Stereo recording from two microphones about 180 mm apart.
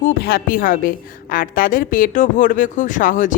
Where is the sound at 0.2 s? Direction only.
55° left (ahead or behind).